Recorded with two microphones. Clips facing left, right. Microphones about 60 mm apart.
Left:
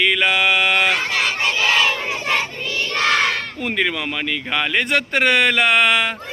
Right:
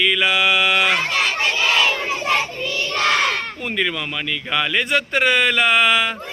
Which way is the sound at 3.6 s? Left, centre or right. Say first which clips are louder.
Left 3 dB; left.